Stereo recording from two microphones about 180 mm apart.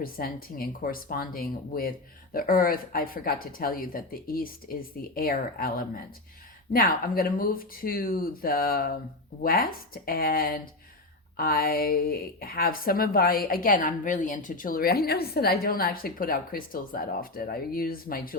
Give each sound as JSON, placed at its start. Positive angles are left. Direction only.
{"t": 0.0, "sound": "speech", "side_deg": 55}